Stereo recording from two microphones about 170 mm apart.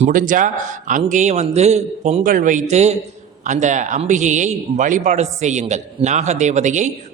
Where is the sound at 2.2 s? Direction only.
50° right (ahead or behind).